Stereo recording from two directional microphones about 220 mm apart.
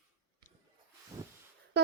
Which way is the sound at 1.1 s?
10° right (ahead or behind).